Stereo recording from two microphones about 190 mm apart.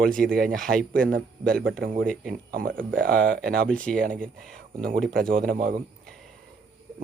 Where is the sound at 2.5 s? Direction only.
50° right (ahead or behind).